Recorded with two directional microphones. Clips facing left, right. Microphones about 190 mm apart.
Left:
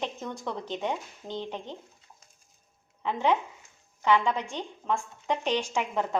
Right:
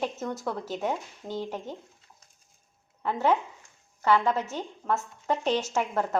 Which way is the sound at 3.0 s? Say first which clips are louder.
Right 1 dB; 5° right (ahead or behind).